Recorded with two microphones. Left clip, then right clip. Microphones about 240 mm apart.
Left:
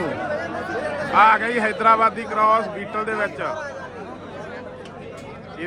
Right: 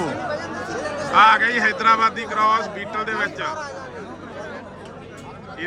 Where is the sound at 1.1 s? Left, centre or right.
Centre.